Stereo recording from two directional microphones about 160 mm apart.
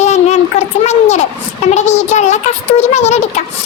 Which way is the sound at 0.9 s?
45° left (ahead or behind).